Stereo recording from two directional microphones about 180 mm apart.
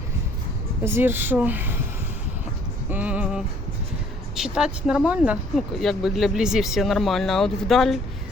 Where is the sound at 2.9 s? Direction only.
10° right (ahead or behind).